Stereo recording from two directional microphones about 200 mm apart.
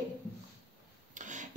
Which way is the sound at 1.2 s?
40° right (ahead or behind).